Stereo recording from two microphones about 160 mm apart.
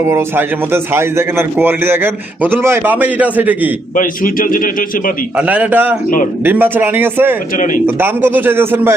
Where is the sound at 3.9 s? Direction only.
60° left (ahead or behind).